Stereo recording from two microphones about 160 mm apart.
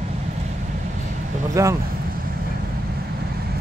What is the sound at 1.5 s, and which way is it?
Speech, 20° right (ahead or behind).